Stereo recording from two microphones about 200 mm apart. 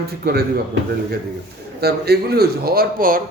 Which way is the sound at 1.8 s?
50° right (ahead or behind).